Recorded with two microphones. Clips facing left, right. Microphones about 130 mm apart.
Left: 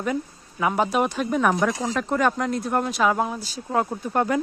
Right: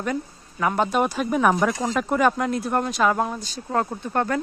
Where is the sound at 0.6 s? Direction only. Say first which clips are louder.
Even; 5° left (ahead or behind).